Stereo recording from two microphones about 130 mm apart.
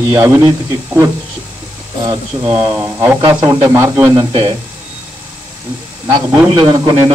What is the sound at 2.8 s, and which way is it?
Speech, 20° right (ahead or behind).